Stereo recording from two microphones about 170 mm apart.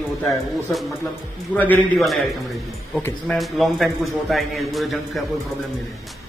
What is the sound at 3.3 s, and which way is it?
A man's voice, centre (ahead or behind).